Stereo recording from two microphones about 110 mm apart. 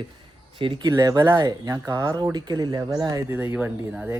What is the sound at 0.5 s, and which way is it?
Speech, 50° right (ahead or behind).